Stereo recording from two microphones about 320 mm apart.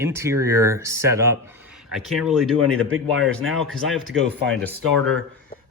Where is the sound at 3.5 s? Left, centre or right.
Centre.